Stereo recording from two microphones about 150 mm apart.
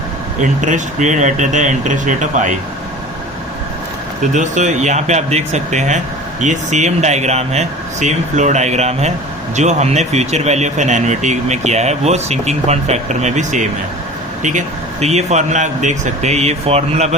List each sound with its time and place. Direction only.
0.4 s speech: 55° right (ahead or behind)
4.2 s speech: 55° right (ahead or behind)
15.0 s speech: 50° right (ahead or behind)